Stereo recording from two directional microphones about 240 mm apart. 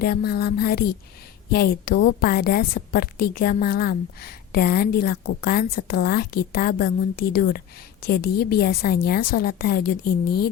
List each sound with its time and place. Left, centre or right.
0.0 s a woman's voice: left